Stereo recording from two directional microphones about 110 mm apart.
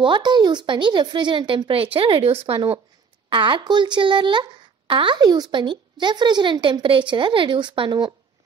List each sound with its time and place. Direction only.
0.0 s speech: 45° right (ahead or behind); by 2.6 s 65° right (ahead or behind)
3.3 s speech: 45° right (ahead or behind)